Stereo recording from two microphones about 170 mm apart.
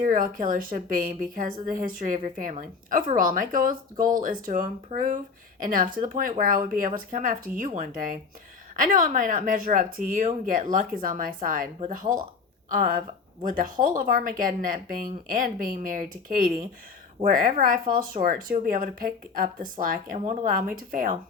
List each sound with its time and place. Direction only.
0.0 s a woman's voice: 50° right (ahead or behind)
20.1 s speech: 40° right (ahead or behind)
20.5 s a woman's voice: 55° right (ahead or behind)